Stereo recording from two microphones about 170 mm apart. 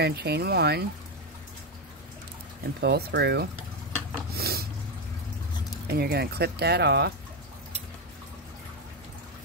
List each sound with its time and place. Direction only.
0.0 s speech: 70° right (ahead or behind)
2.8 s speech: 75° right (ahead or behind)
4.3 s snort: 65° right (ahead or behind)
5.9 s speech: 70° right (ahead or behind)